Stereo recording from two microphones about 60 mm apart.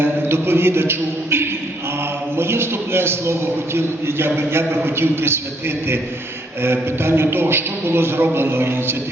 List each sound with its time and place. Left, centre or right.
0.0 s a man's voice: right